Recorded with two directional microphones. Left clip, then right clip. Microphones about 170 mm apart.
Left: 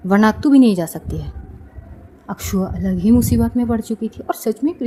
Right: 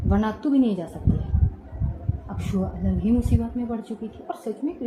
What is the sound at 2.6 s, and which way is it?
Speech, 25° left (ahead or behind).